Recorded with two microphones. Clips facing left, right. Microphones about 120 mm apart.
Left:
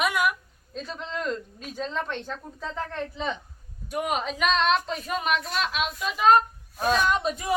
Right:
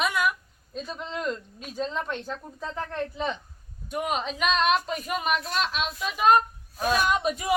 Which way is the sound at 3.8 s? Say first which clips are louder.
Left 1 dB; 5° left (ahead or behind).